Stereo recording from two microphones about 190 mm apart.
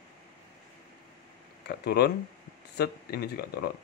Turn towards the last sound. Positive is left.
turn(degrees=55)  # may be behind; listen again after turning